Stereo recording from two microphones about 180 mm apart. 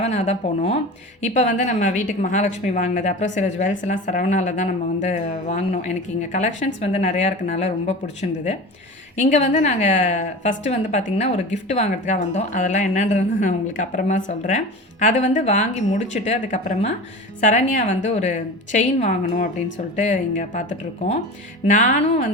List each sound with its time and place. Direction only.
0.0 s speech: 40° left (ahead or behind)
9.1 s speech: 40° left (ahead or behind)
21.7 s speech: 45° left (ahead or behind)